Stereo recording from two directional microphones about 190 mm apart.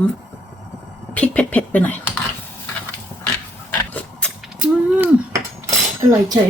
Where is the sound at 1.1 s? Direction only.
5° left (ahead or behind).